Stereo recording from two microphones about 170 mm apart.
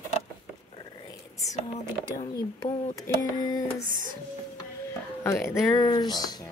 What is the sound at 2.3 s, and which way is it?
Speech, 20° left (ahead or behind).